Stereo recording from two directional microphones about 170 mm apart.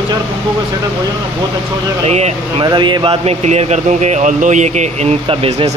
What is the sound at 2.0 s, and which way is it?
Speech, 40° right (ahead or behind).